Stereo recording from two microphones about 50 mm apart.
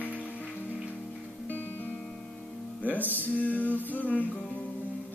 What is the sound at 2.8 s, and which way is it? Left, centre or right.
Music, left.